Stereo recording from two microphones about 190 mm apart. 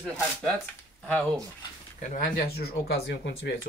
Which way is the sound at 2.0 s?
50° left (ahead or behind).